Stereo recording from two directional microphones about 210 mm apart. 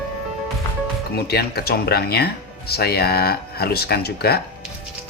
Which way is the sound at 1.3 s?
50° left (ahead or behind).